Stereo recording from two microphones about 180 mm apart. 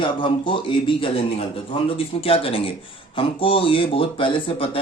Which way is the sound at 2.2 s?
30° left (ahead or behind).